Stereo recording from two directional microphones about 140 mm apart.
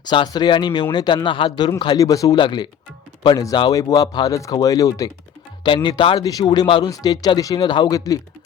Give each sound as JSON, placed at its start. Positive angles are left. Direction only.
{"t": 0.0, "sound": "speech", "side_deg": 30}